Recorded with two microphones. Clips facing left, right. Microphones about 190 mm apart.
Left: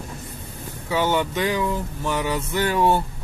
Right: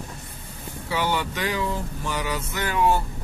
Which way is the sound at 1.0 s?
20° left (ahead or behind).